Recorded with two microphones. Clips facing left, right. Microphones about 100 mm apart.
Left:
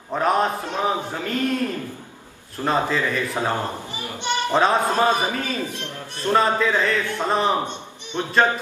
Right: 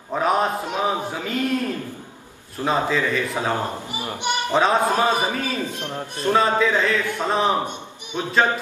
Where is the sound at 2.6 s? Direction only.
5° right (ahead or behind).